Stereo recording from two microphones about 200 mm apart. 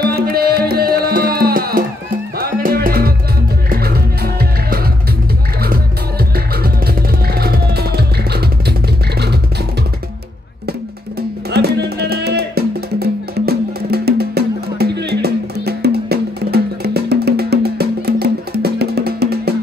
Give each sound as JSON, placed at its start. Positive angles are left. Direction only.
{"t": 0.0, "sound": "music", "side_deg": -50}
{"t": 11.5, "sound": "music", "side_deg": -55}